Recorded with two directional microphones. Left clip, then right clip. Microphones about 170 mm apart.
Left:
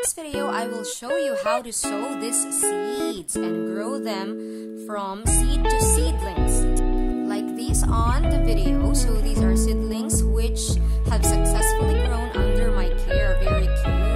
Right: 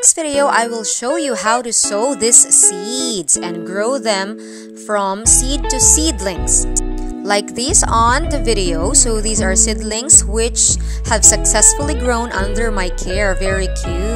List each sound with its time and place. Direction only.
0.2 s speech: 40° right (ahead or behind)
5.5 s speech: 30° right (ahead or behind)